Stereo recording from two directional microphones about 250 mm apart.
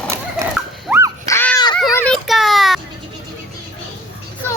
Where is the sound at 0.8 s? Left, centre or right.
Centre.